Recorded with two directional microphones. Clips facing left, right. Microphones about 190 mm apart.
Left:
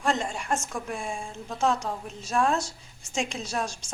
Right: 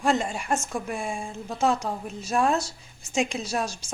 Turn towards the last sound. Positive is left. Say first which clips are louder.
# right 2 dB
turn(degrees=-5)  # may be behind; listen again after turning